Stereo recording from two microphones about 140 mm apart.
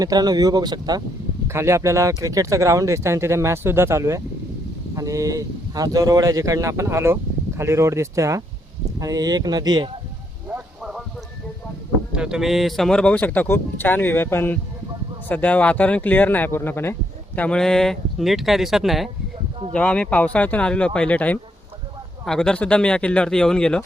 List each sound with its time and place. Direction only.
0.0 s speech: 25° right (ahead or behind)
10.5 s a sound: 5° right (ahead or behind)
12.1 s speech: 5° right (ahead or behind)